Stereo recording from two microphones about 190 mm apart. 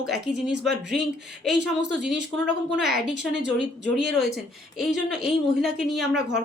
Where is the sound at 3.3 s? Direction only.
65° right (ahead or behind).